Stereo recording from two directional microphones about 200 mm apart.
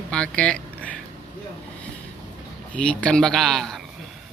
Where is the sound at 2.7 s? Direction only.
5° left (ahead or behind).